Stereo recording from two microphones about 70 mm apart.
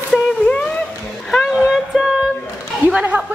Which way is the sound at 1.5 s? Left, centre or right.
Centre.